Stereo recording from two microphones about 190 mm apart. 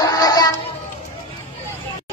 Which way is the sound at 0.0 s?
20° left (ahead or behind).